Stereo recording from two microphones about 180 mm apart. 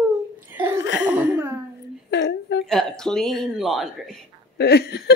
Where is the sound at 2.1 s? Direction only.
70° left (ahead or behind).